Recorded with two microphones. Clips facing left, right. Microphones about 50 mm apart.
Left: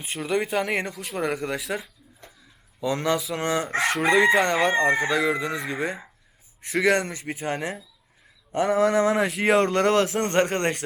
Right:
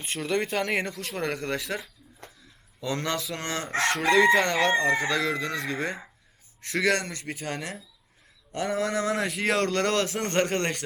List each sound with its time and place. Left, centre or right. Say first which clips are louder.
0.0 s speech: left 2 dB; centre
8.5 s a sound: left 7 dB; centre
9.4 s speech: left 5 dB; centre